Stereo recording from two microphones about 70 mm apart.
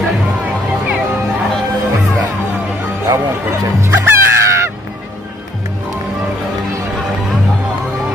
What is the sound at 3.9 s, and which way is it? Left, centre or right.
Music, right.